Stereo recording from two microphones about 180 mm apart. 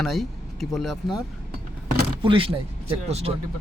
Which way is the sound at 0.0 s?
Centre (ahead or behind).